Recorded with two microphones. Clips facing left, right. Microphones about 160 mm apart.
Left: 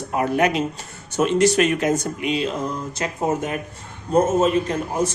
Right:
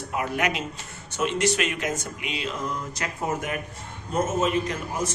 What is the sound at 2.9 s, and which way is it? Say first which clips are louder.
Speech: left 6 dB; 25° left (ahead or behind).